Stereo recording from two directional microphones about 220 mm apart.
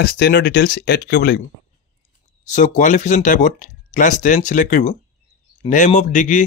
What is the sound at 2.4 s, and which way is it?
Speech, 35° left (ahead or behind).